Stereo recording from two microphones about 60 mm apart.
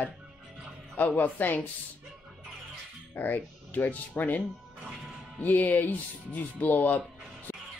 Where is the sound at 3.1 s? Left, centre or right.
Left.